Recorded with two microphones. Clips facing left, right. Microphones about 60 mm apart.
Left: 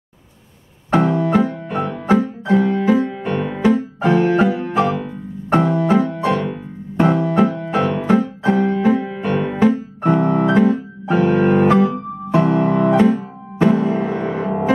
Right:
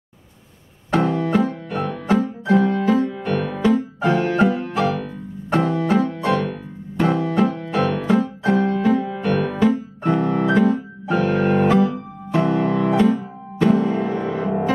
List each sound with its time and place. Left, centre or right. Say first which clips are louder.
0.9 s piano: left 3 dB; left
1.5 s music: left 3 dB; left
2.5 s music: left 1 dB; centre
2.8 s music: left 2 dB; left
6.2 s piano: left 1 dB; centre
8.7 s music: left 2 dB; left
10.0 s piano: left 3 dB; left
11.6 s keyboard: left 3 dB; left
12.3 s music: left 3 dB; left